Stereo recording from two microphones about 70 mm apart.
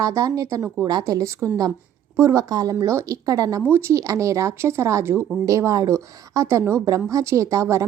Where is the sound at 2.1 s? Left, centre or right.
Right.